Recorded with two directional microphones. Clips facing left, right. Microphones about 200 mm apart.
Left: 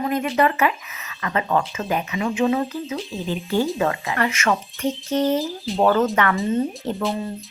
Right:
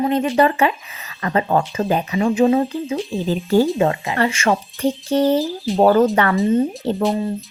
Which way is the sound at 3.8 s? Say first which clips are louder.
Right 4 dB; 25° right (ahead or behind).